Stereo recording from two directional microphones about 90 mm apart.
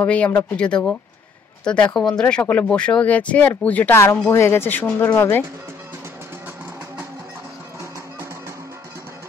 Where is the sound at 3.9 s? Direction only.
30° left (ahead or behind).